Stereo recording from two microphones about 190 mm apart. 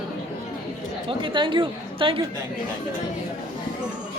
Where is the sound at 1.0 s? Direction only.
25° right (ahead or behind).